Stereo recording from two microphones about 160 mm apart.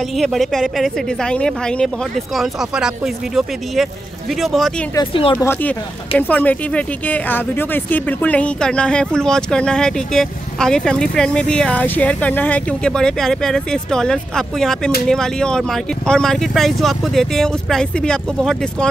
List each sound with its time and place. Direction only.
0.2 s speech: centre (ahead or behind)
4.4 s speech: centre (ahead or behind)
4.9 s speech: 35° left (ahead or behind)
5.3 s speech: 15° left (ahead or behind)